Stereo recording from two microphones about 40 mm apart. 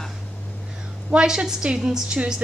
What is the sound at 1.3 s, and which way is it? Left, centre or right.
Speech, centre.